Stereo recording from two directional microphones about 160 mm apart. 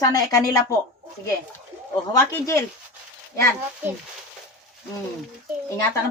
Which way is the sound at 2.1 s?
15° left (ahead or behind).